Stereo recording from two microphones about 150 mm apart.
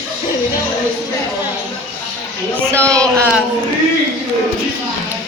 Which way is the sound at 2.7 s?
5° left (ahead or behind).